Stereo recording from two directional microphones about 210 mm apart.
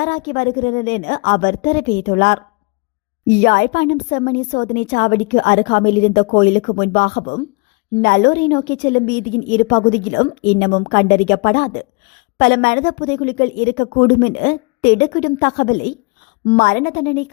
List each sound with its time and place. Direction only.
0.0 s a woman's voice: 40° left (ahead or behind)